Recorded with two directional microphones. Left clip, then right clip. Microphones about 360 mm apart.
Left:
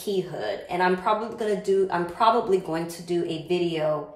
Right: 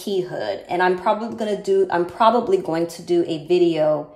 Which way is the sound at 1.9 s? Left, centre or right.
Right.